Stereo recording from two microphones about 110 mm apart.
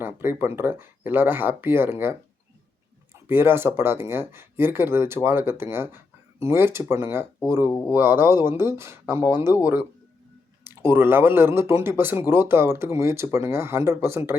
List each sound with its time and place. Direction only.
0.0 s speech: 20° right (ahead or behind)
3.2 s speech: 20° right (ahead or behind)
7.7 s speech: 35° left (ahead or behind)
7.9 s speech: 20° right (ahead or behind)
10.6 s speech: 20° right (ahead or behind)